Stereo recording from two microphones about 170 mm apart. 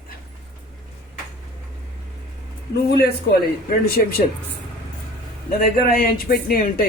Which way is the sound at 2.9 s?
65° left (ahead or behind).